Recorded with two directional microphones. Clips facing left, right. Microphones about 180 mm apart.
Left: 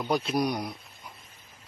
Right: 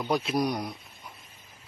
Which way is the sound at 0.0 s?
Centre (ahead or behind).